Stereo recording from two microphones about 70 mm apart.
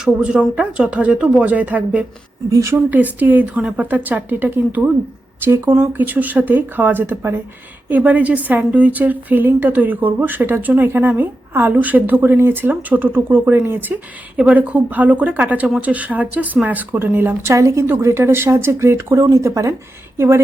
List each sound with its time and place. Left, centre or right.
0.0 s speech: centre
2.5 s a woman's voice: right
2.9 s a woman's voice: right
7.9 s a woman's voice: right
17.5 s a woman's voice: right